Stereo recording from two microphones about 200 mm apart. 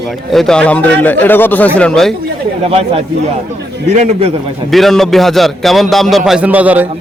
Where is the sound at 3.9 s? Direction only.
35° right (ahead or behind).